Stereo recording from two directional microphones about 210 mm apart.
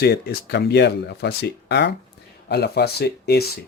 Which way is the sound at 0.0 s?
50° left (ahead or behind).